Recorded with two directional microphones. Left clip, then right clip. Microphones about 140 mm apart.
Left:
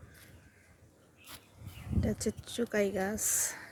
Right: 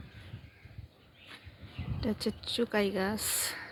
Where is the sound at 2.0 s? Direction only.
5° right (ahead or behind).